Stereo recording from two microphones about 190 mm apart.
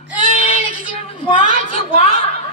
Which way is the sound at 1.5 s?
35° left (ahead or behind).